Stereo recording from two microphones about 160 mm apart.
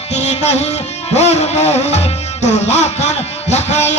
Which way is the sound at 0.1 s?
45° left (ahead or behind).